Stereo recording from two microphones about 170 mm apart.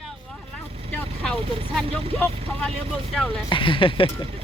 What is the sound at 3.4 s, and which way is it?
Speech, 30° left (ahead or behind).